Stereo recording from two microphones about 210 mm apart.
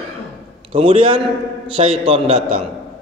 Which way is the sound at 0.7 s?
25° right (ahead or behind).